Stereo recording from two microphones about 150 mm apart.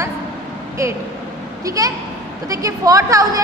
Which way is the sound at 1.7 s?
25° right (ahead or behind).